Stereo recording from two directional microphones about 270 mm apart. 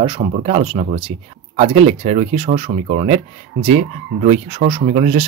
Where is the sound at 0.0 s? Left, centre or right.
Right.